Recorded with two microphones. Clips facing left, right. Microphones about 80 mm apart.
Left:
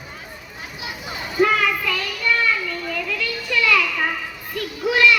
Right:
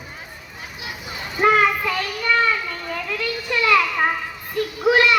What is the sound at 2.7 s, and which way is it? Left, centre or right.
Children playing, right.